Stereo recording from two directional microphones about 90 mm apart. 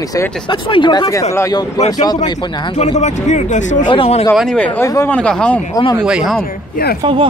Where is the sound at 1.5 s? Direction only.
50° left (ahead or behind).